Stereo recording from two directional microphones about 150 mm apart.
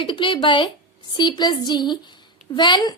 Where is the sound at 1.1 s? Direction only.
30° left (ahead or behind).